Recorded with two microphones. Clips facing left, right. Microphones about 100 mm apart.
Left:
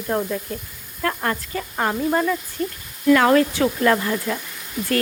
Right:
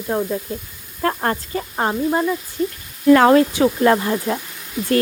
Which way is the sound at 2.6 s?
55° left (ahead or behind).